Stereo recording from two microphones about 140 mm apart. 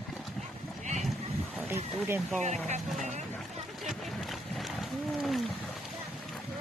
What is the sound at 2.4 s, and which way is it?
Speech, 55° right (ahead or behind).